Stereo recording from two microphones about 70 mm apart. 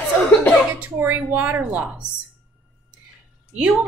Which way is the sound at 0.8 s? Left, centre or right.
Right.